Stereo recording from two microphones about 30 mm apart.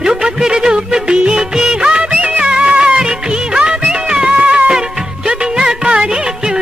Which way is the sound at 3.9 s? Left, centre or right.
Right.